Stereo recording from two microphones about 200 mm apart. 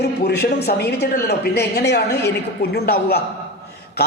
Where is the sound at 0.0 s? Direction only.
55° left (ahead or behind).